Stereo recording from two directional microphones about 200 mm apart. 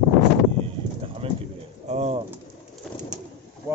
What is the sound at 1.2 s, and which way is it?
Pigeon, 30° right (ahead or behind).